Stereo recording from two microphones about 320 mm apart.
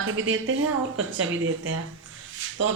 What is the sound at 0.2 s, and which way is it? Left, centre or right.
A woman's voice, right.